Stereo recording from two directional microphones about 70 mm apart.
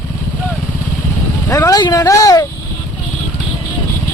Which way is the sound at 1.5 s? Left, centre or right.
Left.